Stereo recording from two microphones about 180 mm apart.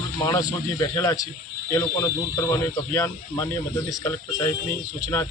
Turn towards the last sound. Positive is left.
turn(degrees=15)  # may be behind; listen again after turning